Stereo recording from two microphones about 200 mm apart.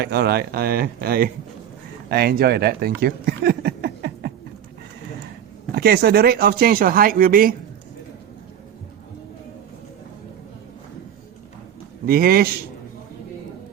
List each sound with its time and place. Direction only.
0.0 s speech: 55° right (ahead or behind)
3.0 s a sound: 50° right (ahead or behind)
5.7 s speech: 50° right (ahead or behind)
12.0 s speech: 50° right (ahead or behind)